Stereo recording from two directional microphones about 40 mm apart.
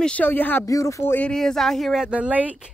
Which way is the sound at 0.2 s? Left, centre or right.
Left.